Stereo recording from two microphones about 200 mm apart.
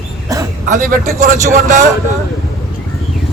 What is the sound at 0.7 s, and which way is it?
A man's voice, 40° right (ahead or behind).